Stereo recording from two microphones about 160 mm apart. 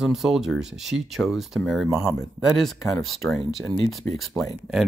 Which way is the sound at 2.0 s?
20° left (ahead or behind).